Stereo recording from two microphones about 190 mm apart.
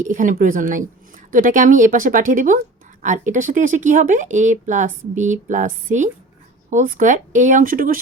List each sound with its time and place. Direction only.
0.0 s speech: 45° right (ahead or behind)